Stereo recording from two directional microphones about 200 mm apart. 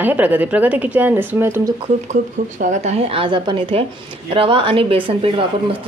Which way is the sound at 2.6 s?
35° right (ahead or behind).